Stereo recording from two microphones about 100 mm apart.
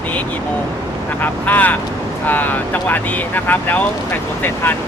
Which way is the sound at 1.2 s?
15° left (ahead or behind).